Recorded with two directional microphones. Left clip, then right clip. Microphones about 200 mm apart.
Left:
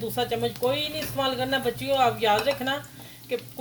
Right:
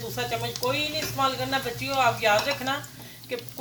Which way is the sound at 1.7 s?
55° left (ahead or behind).